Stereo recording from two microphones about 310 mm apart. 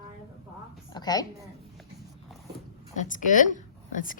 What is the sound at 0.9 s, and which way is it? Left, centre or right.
Speech, centre.